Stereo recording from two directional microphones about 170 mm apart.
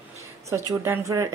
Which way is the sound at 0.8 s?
15° right (ahead or behind).